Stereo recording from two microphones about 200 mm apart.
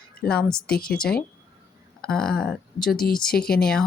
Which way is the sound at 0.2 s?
5° left (ahead or behind).